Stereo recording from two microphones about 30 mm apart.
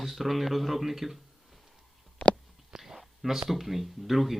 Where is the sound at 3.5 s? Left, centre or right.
Centre.